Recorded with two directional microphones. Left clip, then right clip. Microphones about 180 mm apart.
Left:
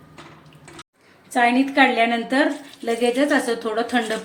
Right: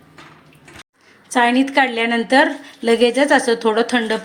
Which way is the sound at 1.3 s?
45° right (ahead or behind).